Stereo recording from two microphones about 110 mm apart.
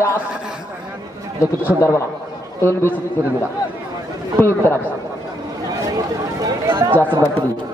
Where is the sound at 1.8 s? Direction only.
25° left (ahead or behind).